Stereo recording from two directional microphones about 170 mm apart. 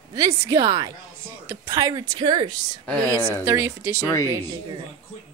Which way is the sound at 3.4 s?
15° right (ahead or behind).